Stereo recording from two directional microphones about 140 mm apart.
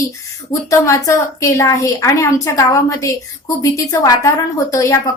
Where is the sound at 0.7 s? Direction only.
20° left (ahead or behind).